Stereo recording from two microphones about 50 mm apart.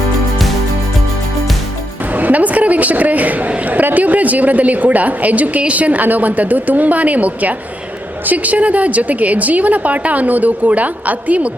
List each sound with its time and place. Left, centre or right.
2.1 s a man's voice: right